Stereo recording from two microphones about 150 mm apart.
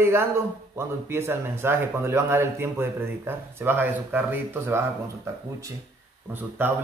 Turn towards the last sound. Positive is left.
turn(degrees=-15)  # may be behind; listen again after turning